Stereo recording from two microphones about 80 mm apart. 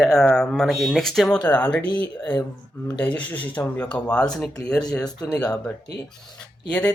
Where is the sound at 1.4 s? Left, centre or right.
Left.